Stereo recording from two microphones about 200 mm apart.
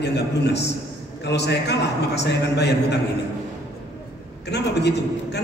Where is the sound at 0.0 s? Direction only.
60° left (ahead or behind).